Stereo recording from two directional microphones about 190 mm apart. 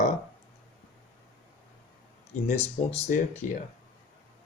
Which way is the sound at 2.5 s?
35° left (ahead or behind).